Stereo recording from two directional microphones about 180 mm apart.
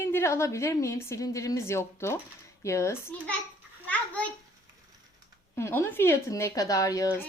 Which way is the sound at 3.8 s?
10° left (ahead or behind).